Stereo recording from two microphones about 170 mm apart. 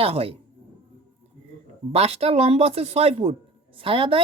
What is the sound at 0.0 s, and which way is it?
Speech, 35° right (ahead or behind).